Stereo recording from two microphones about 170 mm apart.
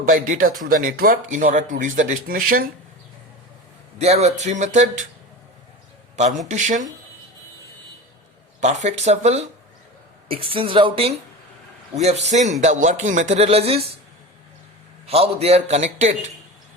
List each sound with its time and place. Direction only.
0.1 s speech: 50° right (ahead or behind)
3.9 s speech: 40° right (ahead or behind)
6.5 s speech: 45° right (ahead or behind)
8.6 s a man's voice: 45° right (ahead or behind)
15.0 s a man's voice: 35° right (ahead or behind)